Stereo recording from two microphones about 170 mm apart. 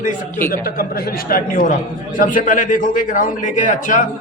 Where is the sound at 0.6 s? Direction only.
60° left (ahead or behind).